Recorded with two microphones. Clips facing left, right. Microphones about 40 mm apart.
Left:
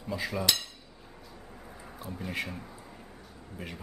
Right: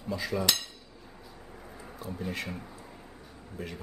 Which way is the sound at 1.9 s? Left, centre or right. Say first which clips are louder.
Right 3 dB; centre.